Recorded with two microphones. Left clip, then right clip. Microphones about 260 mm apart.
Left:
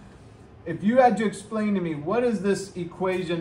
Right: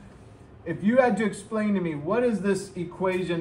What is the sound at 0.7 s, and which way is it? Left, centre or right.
A man's voice, centre.